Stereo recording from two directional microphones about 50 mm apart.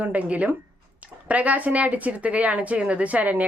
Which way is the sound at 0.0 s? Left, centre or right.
Right.